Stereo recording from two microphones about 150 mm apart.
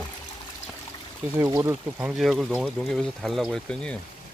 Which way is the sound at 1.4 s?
20° right (ahead or behind).